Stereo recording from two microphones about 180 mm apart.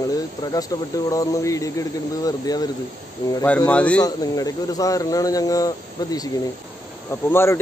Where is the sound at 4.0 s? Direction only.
20° left (ahead or behind).